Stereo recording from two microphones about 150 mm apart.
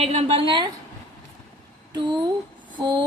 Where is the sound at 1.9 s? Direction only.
30° right (ahead or behind).